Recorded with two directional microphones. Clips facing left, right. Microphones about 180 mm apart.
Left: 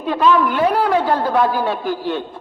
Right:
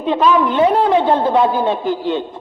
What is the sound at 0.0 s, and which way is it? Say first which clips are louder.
A woman's voice: right 1 dB; 20° right (ahead or behind).